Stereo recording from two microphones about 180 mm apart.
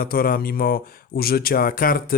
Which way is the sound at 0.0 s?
55° left (ahead or behind).